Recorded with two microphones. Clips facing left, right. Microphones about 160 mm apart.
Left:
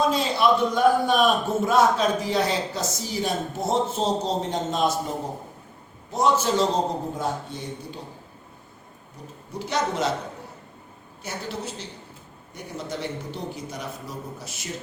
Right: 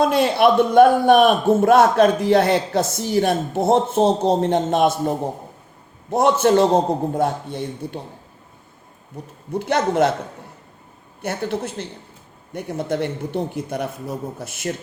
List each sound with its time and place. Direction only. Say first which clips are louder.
0.0 s a man's voice: right 6 dB; 60° right (ahead or behind)
9.2 s a man's voice: right 8 dB; 55° right (ahead or behind)
11.2 s a man's voice: right 8 dB; 55° right (ahead or behind)